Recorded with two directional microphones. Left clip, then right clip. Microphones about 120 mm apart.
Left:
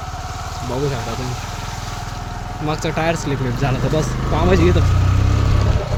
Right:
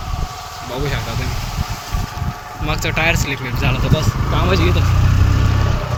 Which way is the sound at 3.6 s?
80° left.